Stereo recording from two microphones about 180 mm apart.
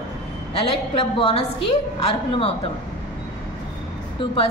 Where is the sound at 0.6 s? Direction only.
30° left (ahead or behind).